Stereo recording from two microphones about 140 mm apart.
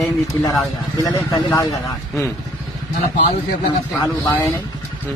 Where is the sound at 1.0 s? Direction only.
25° left (ahead or behind).